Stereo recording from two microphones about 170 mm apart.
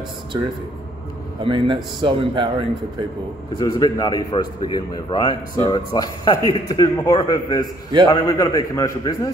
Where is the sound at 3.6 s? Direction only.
20° left (ahead or behind).